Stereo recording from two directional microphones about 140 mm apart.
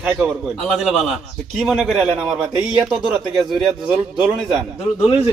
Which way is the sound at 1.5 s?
5° right (ahead or behind).